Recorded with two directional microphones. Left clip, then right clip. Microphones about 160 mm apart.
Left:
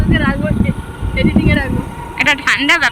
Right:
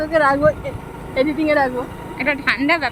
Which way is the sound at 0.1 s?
90° right.